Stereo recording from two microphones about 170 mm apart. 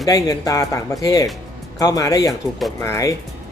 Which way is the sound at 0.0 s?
20° left (ahead or behind).